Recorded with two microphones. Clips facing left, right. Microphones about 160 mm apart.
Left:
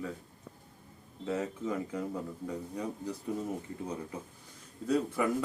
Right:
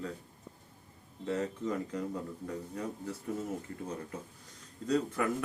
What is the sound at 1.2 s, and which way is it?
Speech, 5° left (ahead or behind).